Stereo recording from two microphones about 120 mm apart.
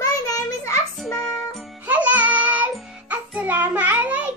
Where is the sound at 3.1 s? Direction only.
10° right (ahead or behind).